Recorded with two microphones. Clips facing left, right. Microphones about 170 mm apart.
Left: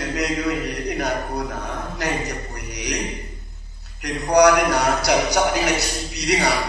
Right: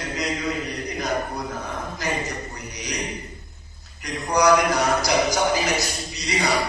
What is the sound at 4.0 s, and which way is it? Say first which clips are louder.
A man's voice: left 5 dB; 70° left (ahead or behind).